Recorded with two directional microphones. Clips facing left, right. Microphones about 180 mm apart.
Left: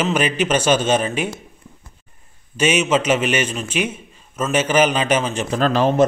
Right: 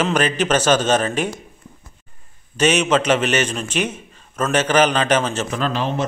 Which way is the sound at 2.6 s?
10° left (ahead or behind).